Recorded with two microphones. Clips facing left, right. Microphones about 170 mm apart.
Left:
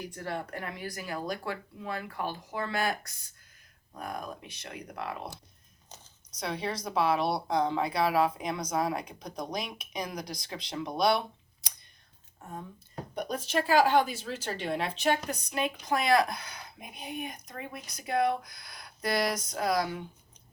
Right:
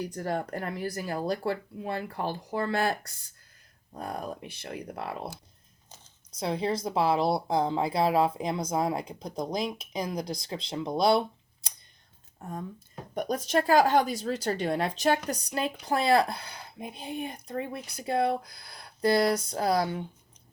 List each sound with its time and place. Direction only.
0.1 s speech: 40° right (ahead or behind)
3.9 s speech: 30° right (ahead or behind)
6.4 s speech: 25° right (ahead or behind)
13.1 s speech: 45° right (ahead or behind)